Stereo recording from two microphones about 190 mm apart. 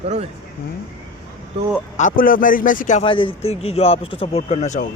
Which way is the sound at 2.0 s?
45° left (ahead or behind).